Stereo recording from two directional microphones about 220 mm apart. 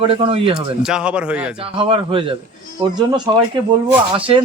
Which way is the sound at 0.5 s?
5° right (ahead or behind).